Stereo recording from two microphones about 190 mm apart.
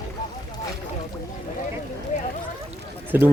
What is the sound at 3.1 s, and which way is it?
Speech, 10° right (ahead or behind).